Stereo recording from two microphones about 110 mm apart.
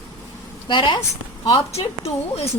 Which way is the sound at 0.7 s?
45° left (ahead or behind).